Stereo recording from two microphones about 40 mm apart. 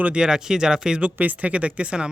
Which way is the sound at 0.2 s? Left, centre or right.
Centre.